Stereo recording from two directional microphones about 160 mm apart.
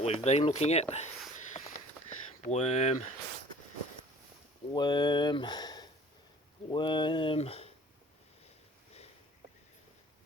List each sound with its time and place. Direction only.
0.0 s speech: 40° left (ahead or behind)
1.4 s a sound: 45° left (ahead or behind)
4.7 s speech: 25° left (ahead or behind)